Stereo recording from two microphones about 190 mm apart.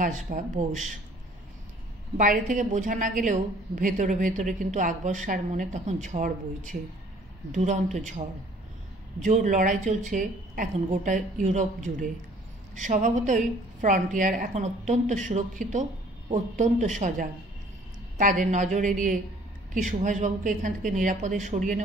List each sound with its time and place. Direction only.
0.0 s a woman's voice: 45° right (ahead or behind)
2.1 s a woman's voice: 40° right (ahead or behind)
9.2 s a woman's voice: 40° right (ahead or behind)